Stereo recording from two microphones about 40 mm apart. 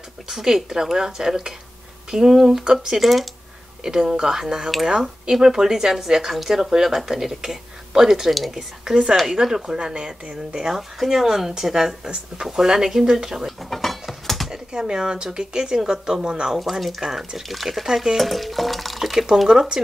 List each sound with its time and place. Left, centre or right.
0.3 s speech: centre
3.0 s speech: centre
3.8 s speech: centre
8.5 s speech: centre
10.6 s speech: centre
13.5 s dishes: centre
14.2 s computer keyboard: centre
14.5 s speech: centre
17.5 s speech: centre
17.8 s speech: centre
18.1 s speech: centre